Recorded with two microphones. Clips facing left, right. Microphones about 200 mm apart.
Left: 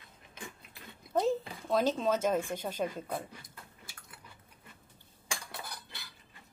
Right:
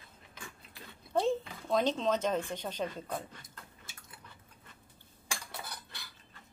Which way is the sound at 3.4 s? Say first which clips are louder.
Left 1 dB; 25° right (ahead or behind).